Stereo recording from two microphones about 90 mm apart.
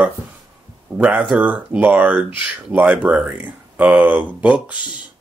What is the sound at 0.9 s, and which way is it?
Speech, 15° right (ahead or behind).